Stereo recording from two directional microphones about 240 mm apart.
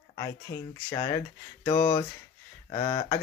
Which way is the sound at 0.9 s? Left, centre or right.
Centre.